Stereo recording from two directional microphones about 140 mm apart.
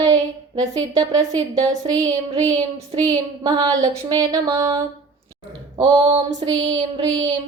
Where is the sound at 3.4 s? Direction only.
30° right (ahead or behind).